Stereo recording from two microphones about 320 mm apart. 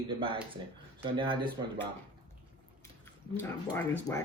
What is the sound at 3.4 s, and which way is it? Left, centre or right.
Speech, centre.